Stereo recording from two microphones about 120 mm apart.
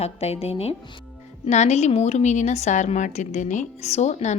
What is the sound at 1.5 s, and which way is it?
A woman's voice, 70° left (ahead or behind).